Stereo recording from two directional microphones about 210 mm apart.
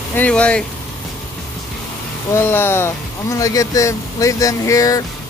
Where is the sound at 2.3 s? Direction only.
10° left (ahead or behind).